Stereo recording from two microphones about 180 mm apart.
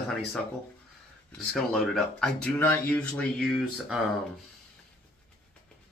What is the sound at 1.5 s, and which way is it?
Speech, centre (ahead or behind).